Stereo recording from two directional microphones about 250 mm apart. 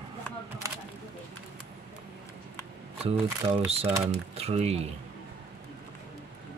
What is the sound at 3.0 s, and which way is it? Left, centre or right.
Speech, right.